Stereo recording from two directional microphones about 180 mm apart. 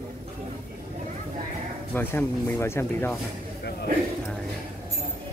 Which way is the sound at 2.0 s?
15° left (ahead or behind).